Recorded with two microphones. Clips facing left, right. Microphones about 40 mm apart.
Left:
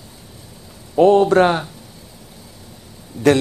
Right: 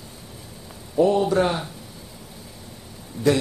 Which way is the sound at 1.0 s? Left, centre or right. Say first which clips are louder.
Left 7 dB; left.